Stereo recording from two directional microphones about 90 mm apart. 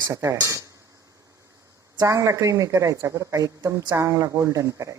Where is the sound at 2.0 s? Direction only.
35° right (ahead or behind).